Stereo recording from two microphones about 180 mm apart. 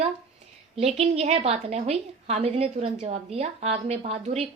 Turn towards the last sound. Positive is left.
turn(degrees=-35)  # may be behind; listen again after turning